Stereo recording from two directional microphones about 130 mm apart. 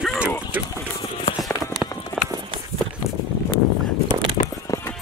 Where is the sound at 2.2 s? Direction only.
Centre (ahead or behind).